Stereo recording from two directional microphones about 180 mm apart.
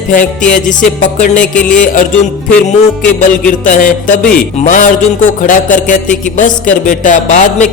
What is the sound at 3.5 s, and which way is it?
Speech, 45° left (ahead or behind).